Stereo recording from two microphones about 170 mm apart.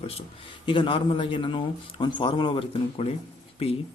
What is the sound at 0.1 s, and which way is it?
Speech, 35° left (ahead or behind).